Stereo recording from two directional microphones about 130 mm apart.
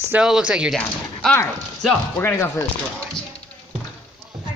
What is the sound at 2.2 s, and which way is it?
Speech, 20° left (ahead or behind).